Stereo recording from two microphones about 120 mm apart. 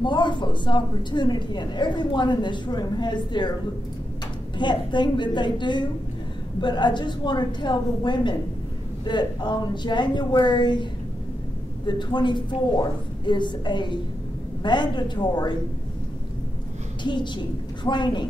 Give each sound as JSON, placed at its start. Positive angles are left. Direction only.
{"t": 0.0, "sound": "a woman's voice", "side_deg": 40}
{"t": 4.6, "sound": "a woman's voice", "side_deg": 40}
{"t": 17.0, "sound": "a woman's voice", "side_deg": 40}